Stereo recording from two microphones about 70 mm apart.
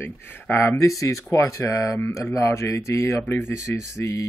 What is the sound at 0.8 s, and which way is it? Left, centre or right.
Speech, left.